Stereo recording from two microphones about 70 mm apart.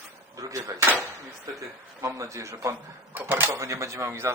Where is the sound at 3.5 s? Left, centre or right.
Right.